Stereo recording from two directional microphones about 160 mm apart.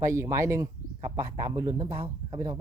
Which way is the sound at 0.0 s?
15° right (ahead or behind).